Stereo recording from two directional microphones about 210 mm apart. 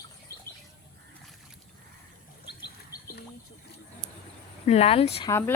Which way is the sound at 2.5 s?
50° left (ahead or behind).